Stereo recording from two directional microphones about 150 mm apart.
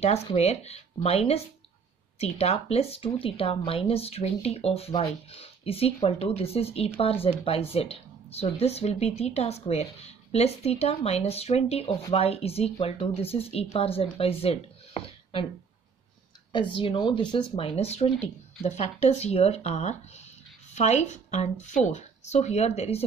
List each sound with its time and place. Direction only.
0.0 s speech: 45° left (ahead or behind)
16.5 s a woman's voice: 35° left (ahead or behind)